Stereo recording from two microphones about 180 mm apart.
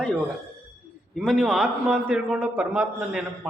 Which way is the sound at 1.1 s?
Centre (ahead or behind).